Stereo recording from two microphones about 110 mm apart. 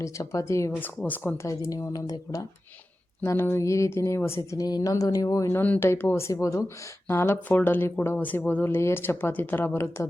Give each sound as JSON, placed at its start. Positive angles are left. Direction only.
{"t": 0.0, "sound": "speech", "side_deg": 30}
{"t": 1.0, "sound": "speech", "side_deg": 15}
{"t": 1.5, "sound": "speech", "side_deg": 30}
{"t": 3.2, "sound": "speech", "side_deg": 20}